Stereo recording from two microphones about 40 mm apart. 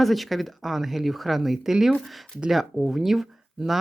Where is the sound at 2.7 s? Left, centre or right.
Centre.